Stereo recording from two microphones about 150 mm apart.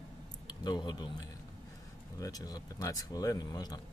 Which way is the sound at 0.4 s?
30° left (ahead or behind).